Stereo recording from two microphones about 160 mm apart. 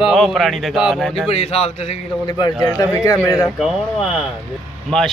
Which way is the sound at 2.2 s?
25° left (ahead or behind).